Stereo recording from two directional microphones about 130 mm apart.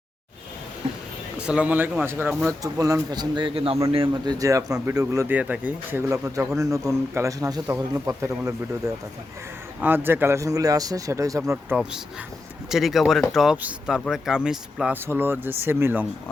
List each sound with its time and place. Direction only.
1.4 s speech: 10° right (ahead or behind)
2.7 s a man's voice: 25° right (ahead or behind)
4.4 s a man's voice: 25° right (ahead or behind)
6.2 s a man's voice: 25° right (ahead or behind)
12.7 s speech: centre (ahead or behind)
15.0 s speech: 15° right (ahead or behind)